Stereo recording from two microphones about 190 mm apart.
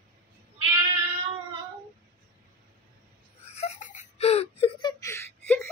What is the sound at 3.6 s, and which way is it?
Whimper, 40° left (ahead or behind).